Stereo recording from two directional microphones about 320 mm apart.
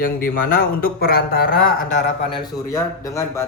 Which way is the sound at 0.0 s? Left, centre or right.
Left.